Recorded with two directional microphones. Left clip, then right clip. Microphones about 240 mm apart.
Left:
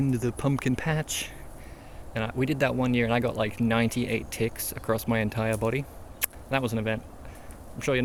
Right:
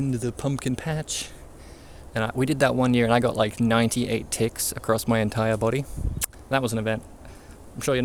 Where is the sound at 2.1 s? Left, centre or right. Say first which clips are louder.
Right 4 dB; right.